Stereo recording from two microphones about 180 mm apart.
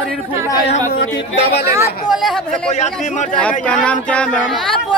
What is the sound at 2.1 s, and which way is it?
Speech, centre (ahead or behind).